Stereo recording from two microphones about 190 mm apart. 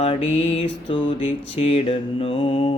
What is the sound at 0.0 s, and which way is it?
Mantra, 30° left (ahead or behind).